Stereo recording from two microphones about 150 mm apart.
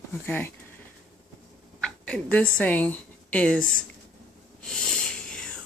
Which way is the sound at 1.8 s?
5° left (ahead or behind).